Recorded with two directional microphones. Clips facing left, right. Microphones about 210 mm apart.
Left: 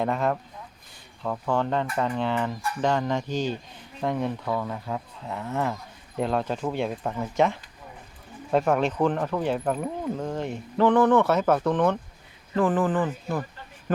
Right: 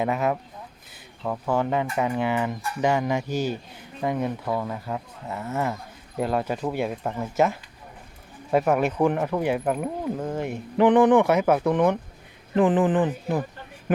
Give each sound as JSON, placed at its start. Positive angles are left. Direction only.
{"t": 0.0, "sound": "speech", "side_deg": -5}